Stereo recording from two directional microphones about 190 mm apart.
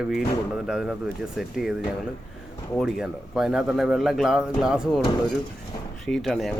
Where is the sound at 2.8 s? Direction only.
Centre (ahead or behind).